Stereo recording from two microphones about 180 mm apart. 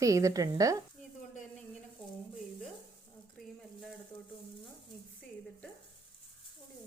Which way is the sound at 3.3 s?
Centre (ahead or behind).